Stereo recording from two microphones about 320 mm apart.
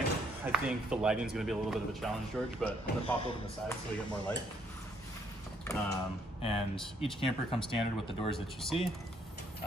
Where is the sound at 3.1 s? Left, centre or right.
Centre.